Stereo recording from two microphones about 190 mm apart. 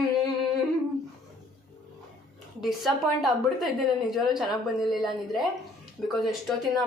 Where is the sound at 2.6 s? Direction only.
Centre (ahead or behind).